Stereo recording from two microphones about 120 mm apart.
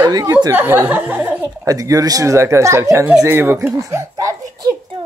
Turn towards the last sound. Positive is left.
turn(degrees=-30)  # may be behind; listen again after turning